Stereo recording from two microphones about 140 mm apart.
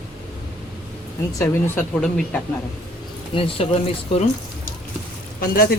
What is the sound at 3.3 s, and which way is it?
Speech, 35° left (ahead or behind).